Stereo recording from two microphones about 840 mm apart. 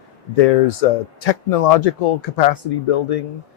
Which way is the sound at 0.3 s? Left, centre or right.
Left.